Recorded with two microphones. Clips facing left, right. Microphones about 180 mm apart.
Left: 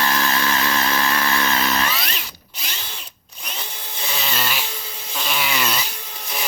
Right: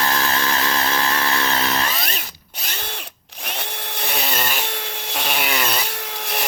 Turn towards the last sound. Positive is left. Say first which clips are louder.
# right 5 dB
turn(degrees=-80)